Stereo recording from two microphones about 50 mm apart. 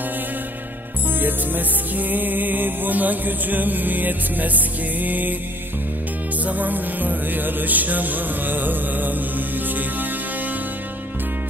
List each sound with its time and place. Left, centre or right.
1.2 s music: right
6.4 s music: right